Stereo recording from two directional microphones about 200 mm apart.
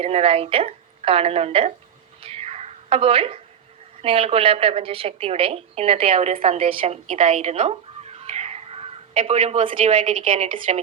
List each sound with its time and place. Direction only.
0.0 s a woman's voice: 30° right (ahead or behind)
2.2 s a sound: 30° right (ahead or behind)
4.0 s a woman's voice: 30° right (ahead or behind)